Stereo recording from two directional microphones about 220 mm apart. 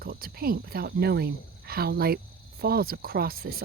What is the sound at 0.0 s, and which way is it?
Speech, 45° right (ahead or behind).